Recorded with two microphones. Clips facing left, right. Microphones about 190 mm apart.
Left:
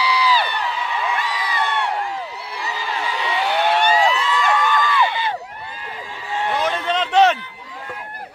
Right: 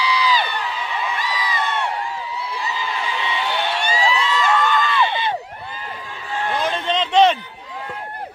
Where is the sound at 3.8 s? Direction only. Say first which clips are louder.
Left 6 dB; 55° left (ahead or behind).